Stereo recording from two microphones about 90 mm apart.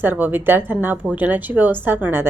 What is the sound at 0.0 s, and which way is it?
A woman's voice, 20° right (ahead or behind).